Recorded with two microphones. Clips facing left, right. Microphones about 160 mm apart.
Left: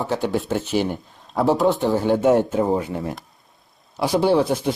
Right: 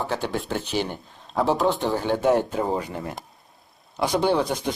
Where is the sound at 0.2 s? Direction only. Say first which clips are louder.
Left 5 dB; 5° left (ahead or behind).